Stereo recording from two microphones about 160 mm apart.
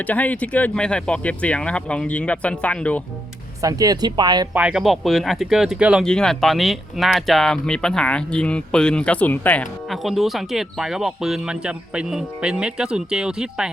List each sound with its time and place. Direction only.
0.0 s speech: 10° left (ahead or behind)
3.6 s speech: 20° right (ahead or behind)
4.5 s speech: 5° right (ahead or behind)